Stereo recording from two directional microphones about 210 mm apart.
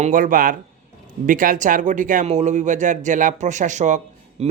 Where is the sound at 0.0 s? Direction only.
40° right (ahead or behind).